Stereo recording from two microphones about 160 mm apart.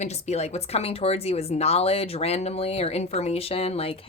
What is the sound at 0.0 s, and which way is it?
Speech, 45° left (ahead or behind).